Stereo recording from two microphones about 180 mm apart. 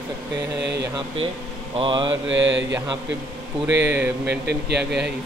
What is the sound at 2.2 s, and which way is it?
Mantra, 90° right.